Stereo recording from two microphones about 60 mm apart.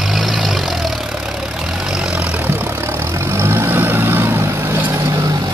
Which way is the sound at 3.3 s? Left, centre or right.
Right.